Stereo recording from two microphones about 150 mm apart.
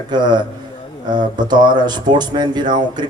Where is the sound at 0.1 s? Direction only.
30° right (ahead or behind).